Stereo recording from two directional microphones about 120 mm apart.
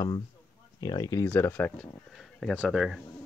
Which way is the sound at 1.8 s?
5° left (ahead or behind).